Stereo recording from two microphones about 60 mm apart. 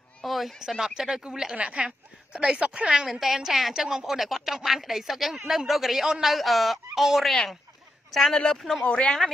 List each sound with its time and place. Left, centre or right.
0.2 s speech: centre
8.4 s speech: centre